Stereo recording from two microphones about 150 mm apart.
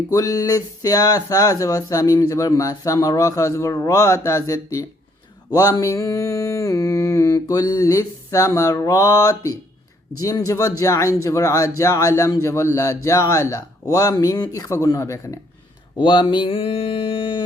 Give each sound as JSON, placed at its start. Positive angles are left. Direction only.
{"t": 0.1, "sound": "speech", "side_deg": 20}
{"t": 16.0, "sound": "speech", "side_deg": 30}